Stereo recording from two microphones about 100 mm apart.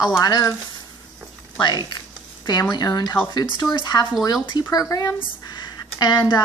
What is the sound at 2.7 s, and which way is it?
Speech, 40° left (ahead or behind).